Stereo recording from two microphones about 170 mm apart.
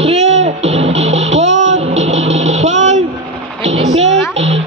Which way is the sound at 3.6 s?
40° right (ahead or behind).